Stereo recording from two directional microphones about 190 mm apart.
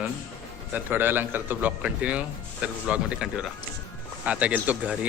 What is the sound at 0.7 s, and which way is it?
A man's voice, 10° right (ahead or behind).